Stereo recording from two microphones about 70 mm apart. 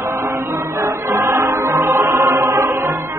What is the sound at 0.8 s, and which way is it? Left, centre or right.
Music, right.